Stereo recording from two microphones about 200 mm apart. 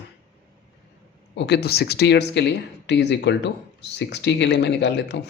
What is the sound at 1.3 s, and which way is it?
Speech, 60° left (ahead or behind).